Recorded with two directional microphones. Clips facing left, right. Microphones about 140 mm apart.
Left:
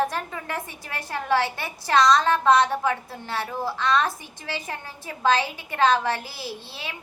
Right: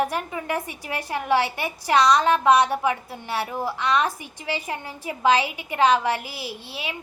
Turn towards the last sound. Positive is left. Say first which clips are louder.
# right 2 dB
turn(degrees=-15)  # may be behind; listen again after turning